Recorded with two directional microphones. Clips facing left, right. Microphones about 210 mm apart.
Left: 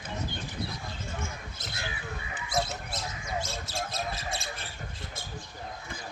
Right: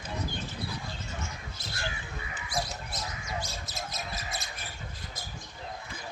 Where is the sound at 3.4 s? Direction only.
30° left (ahead or behind).